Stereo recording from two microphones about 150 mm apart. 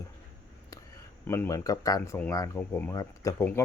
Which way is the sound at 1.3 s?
15° left (ahead or behind).